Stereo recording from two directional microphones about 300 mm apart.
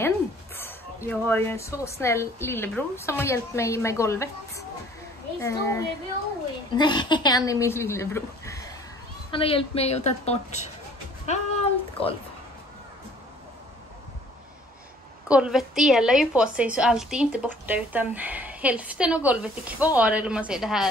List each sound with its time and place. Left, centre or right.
0.6 s a woman's voice: centre
11.2 s a sound: left
15.2 s a woman's voice: centre